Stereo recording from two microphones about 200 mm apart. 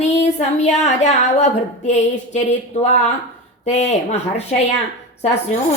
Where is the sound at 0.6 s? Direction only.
35° left (ahead or behind).